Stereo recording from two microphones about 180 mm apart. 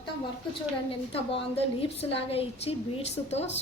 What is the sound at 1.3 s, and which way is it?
A woman's voice, 30° left (ahead or behind).